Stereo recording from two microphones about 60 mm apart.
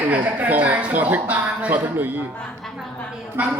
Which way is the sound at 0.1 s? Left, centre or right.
Right.